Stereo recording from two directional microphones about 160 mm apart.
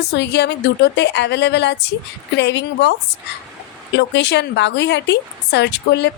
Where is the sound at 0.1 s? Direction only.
90° left.